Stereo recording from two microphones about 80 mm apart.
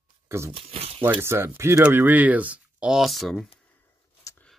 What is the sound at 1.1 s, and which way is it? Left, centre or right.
Speech, right.